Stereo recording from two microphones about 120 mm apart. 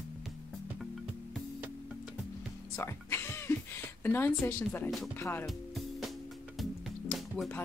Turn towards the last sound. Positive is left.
turn(degrees=0)  # may be behind; listen again after turning